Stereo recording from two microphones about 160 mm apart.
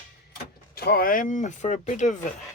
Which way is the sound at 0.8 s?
70° left (ahead or behind).